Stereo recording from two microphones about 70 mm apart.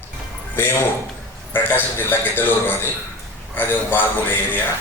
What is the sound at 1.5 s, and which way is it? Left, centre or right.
A man's voice, left.